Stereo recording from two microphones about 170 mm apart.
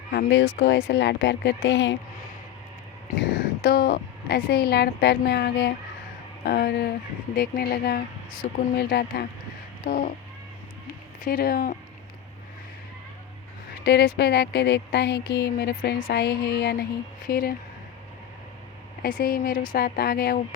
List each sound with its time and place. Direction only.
0.1 s speech: 85° left
3.2 s a woman's voice: 65° left (ahead or behind)
9.8 s cat: 55° left (ahead or behind)
11.2 s a woman's voice: 60° left (ahead or behind)
13.8 s a woman's voice: 75° left (ahead or behind)
15.8 s a woman's voice: 60° left (ahead or behind)
19.0 s a woman's voice: 60° left (ahead or behind)